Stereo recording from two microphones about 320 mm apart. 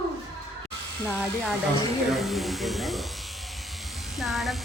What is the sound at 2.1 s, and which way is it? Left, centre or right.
Speech, centre.